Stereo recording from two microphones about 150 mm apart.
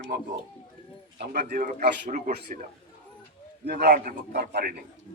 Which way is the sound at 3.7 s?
85° right.